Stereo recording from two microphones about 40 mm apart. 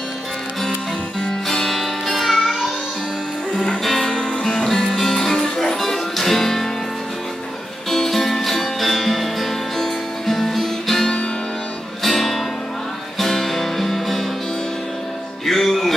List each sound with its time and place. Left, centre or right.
1.2 s music: centre
3.8 s music: centre
4.1 s music: left
4.6 s music: centre
7.9 s music: centre
15.4 s music: centre